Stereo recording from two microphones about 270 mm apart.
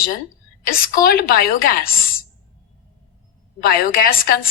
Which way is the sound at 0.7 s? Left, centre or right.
Left.